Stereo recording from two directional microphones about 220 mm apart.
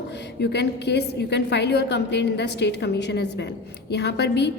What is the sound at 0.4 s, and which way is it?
A woman's voice, 50° left (ahead or behind).